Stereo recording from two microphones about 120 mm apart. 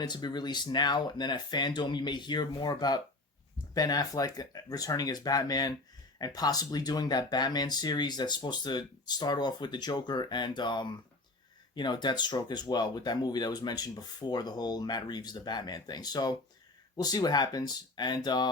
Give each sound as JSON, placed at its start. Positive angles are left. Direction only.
{"t": 0.0, "sound": "speech", "side_deg": 35}